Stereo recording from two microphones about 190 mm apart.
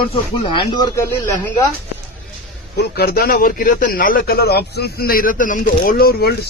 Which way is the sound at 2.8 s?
55° left (ahead or behind).